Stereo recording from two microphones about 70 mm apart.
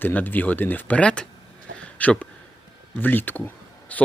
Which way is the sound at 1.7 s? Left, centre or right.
Centre.